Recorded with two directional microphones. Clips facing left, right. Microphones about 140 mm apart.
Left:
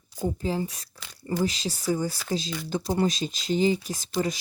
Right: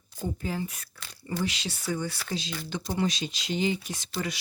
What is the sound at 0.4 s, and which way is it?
Speech, 30° left (ahead or behind).